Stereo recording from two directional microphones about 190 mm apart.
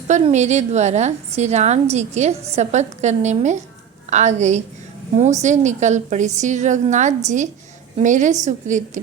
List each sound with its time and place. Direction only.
0.1 s a woman's voice: 35° right (ahead or behind)